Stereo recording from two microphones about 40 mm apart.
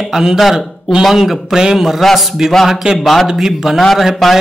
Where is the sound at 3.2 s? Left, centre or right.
Centre.